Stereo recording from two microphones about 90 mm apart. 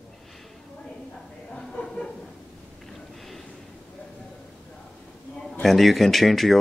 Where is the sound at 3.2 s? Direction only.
Centre (ahead or behind).